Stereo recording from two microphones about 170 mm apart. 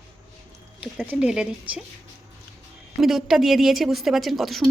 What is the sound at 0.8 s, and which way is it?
A woman's voice, 5° right (ahead or behind).